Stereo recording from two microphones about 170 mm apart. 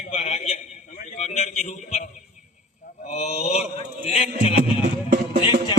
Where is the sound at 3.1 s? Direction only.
40° left (ahead or behind).